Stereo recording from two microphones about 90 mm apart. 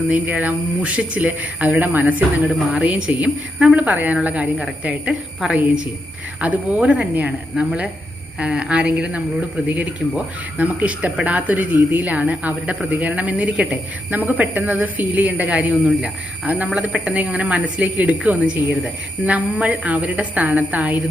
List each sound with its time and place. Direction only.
0.1 s a woman's voice: 15° right (ahead or behind)